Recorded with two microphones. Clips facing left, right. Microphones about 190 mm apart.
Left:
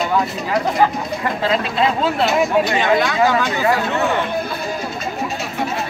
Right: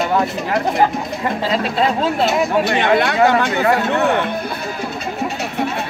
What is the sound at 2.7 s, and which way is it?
Chatter, 60° right (ahead or behind).